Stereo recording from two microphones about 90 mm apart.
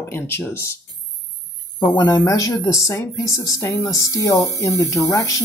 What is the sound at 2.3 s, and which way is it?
Speech, 40° left (ahead or behind).